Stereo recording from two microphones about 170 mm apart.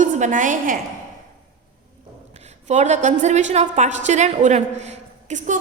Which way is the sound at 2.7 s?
45° right (ahead or behind).